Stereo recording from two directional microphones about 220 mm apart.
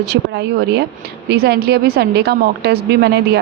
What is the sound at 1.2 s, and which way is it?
A woman's voice, 50° right (ahead or behind).